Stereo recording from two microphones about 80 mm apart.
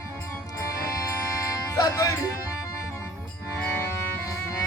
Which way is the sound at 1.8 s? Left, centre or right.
Left.